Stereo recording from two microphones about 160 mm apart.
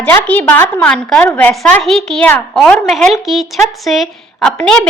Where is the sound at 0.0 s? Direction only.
10° left (ahead or behind).